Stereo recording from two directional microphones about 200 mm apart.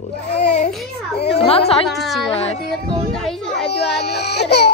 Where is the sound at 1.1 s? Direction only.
55° left (ahead or behind).